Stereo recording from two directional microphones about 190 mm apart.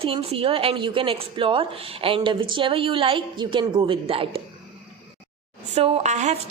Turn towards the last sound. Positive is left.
turn(degrees=-40)  # may be behind; listen again after turning